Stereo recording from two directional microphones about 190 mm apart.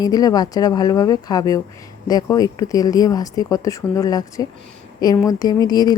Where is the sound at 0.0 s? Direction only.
20° left (ahead or behind).